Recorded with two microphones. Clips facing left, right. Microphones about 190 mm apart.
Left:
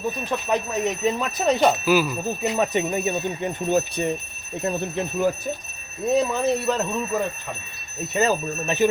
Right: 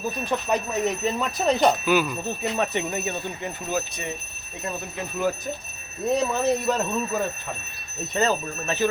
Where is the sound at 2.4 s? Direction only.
15° left (ahead or behind).